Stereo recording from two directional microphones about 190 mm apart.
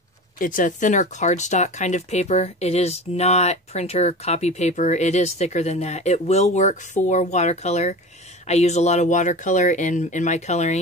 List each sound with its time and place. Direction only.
0.4 s speech: 45° left (ahead or behind)